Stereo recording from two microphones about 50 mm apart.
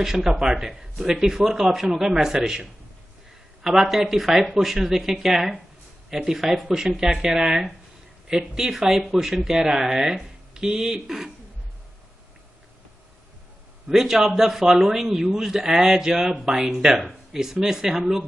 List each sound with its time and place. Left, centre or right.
0.0 s speech: centre
13.8 s speech: centre